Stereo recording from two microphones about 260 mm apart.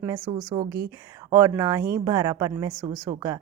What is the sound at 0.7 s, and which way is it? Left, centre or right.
Speech, right.